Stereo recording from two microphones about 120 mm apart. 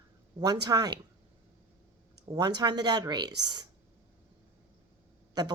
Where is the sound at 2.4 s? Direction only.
35° right (ahead or behind).